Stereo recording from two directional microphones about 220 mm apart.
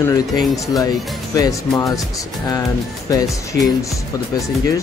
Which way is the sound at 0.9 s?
Centre (ahead or behind).